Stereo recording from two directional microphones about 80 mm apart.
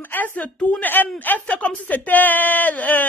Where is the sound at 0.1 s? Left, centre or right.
Left.